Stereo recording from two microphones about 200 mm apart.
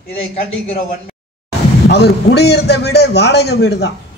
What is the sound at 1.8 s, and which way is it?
A man's voice, 55° left (ahead or behind).